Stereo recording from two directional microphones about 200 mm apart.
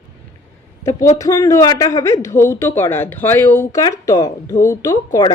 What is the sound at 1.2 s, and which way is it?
Speech, 15° left (ahead or behind).